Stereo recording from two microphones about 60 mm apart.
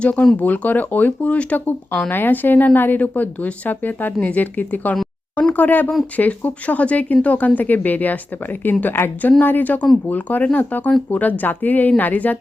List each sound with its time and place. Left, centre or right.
0.0 s a woman's voice: left